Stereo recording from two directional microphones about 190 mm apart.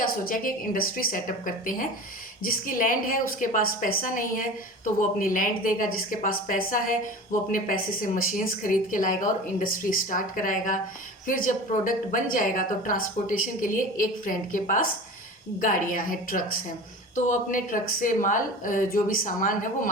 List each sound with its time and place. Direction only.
0.0 s a woman's voice: 50° left (ahead or behind)